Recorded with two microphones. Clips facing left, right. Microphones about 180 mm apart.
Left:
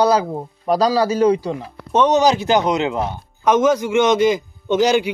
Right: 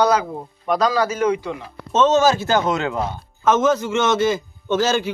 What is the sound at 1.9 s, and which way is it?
Speech, 15° left (ahead or behind).